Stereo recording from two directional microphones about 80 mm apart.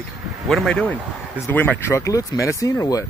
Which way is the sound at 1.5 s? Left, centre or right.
Left.